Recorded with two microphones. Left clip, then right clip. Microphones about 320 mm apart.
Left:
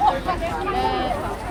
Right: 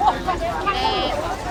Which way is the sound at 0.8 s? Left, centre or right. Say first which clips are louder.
Right 2 dB; left.